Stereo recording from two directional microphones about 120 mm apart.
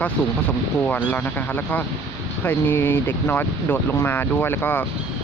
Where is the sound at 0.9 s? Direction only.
15° left (ahead or behind).